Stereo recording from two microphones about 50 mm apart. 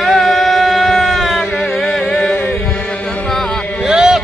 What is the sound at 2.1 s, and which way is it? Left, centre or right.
Chant, centre.